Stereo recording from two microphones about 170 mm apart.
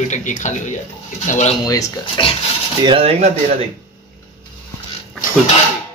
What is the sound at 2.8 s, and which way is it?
Speech, 35° right (ahead or behind).